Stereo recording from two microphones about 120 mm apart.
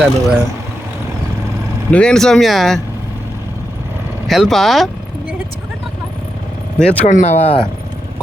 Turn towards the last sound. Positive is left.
turn(degrees=70)  # may be behind; listen again after turning